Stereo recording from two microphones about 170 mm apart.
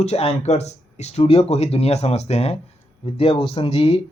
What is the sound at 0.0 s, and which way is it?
Speech, 35° left (ahead or behind).